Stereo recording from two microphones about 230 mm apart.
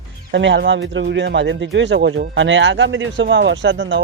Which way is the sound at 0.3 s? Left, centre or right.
Right.